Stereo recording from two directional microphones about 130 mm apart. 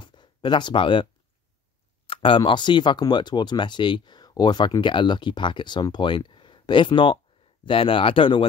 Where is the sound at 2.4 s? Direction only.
35° left (ahead or behind).